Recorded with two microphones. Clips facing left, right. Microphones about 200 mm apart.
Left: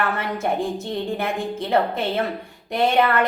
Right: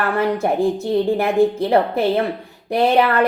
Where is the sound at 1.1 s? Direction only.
35° right (ahead or behind).